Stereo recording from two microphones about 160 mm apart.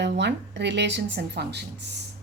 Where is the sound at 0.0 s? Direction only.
90° right.